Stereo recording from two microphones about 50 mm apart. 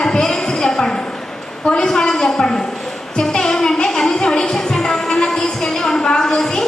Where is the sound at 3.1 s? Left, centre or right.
Centre.